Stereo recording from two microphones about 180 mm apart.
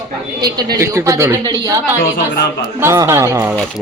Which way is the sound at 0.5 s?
20° right (ahead or behind).